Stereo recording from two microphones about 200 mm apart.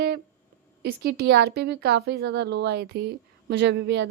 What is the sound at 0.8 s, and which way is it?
A woman's voice, 55° right (ahead or behind).